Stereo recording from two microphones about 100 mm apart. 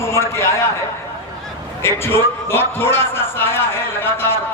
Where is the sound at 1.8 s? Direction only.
25° left (ahead or behind).